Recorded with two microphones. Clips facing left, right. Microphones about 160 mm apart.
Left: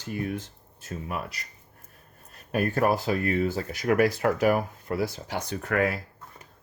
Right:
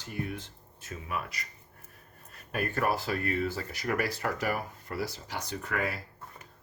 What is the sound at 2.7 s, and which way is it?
Speech, 45° left (ahead or behind).